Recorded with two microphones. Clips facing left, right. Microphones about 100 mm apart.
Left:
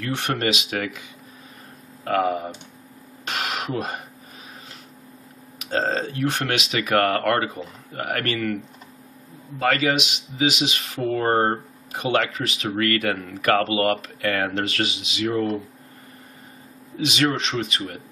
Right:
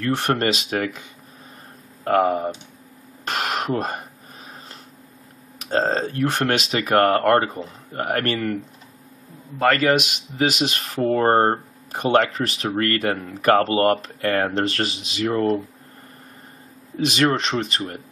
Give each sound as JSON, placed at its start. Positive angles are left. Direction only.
{"t": 0.0, "sound": "speech", "side_deg": -40}
{"t": 2.0, "sound": "speech", "side_deg": -40}
{"t": 3.3, "sound": "a sound", "side_deg": -45}
{"t": 5.6, "sound": "speech", "side_deg": -35}
{"t": 9.6, "sound": "speech", "side_deg": -50}
{"t": 17.0, "sound": "speech", "side_deg": -40}